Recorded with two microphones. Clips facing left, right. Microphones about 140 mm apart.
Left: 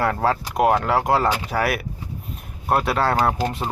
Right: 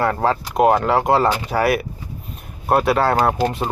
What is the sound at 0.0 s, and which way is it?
Speech, centre (ahead or behind).